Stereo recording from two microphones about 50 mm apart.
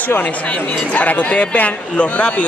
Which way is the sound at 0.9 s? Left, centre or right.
Left.